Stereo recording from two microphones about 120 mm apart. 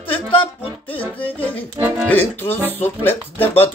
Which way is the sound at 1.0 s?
15° left (ahead or behind).